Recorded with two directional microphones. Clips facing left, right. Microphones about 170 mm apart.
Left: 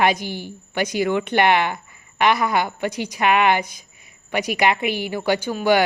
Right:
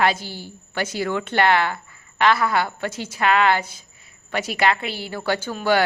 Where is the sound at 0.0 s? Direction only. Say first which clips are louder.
Left 2 dB; 15° left (ahead or behind).